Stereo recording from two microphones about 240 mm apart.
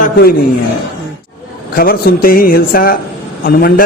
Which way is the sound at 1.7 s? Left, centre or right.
Left.